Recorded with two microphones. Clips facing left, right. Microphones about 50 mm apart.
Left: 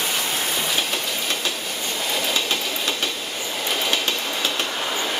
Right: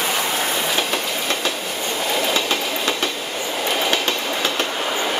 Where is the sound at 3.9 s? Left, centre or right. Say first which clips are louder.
Right 3 dB; right.